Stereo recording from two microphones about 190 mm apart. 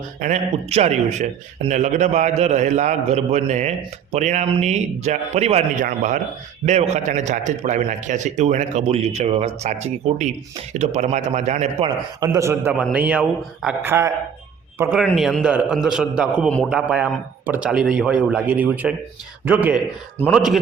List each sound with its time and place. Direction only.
0.2 s speech: 35° right (ahead or behind)
12.2 s speech: 15° right (ahead or behind); by 20.6 s centre (ahead or behind)